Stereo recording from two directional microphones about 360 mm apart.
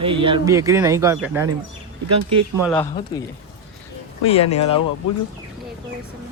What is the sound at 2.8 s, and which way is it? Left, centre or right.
Speech, centre.